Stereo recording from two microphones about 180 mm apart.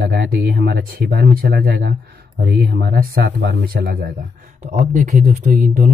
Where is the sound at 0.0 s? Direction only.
60° right (ahead or behind).